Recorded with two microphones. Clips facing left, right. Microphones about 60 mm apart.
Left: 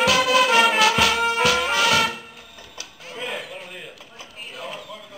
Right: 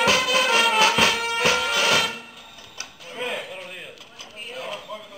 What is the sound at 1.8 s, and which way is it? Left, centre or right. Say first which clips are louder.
Music: left 3 dB; right.